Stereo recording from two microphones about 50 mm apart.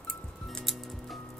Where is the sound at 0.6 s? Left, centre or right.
Centre.